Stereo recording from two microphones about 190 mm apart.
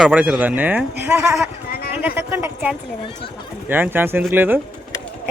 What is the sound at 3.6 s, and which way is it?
Speech, 10° right (ahead or behind).